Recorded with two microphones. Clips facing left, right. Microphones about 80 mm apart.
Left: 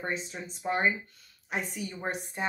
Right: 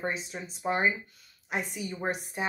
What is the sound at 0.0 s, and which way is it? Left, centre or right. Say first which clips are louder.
A woman's voice: right 1 dB; centre.